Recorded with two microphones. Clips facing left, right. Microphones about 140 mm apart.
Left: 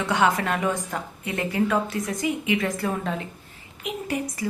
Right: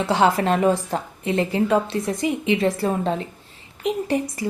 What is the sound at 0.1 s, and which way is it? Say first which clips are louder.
A woman's voice: right 4 dB; 30° right (ahead or behind).